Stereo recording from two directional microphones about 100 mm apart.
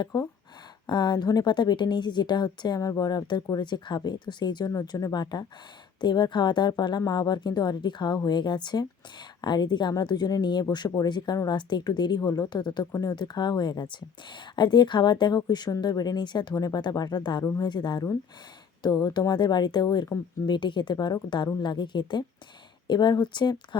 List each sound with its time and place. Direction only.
0.1 s a woman's voice: 45° left (ahead or behind)